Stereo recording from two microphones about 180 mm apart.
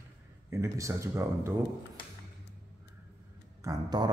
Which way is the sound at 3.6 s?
20° right (ahead or behind).